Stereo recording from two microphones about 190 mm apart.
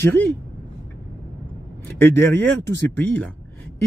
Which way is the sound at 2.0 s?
10° left (ahead or behind).